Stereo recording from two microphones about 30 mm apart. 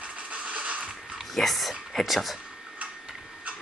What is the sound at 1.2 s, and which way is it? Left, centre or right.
Speech, centre.